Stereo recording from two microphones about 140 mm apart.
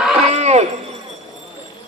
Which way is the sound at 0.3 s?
50° right (ahead or behind).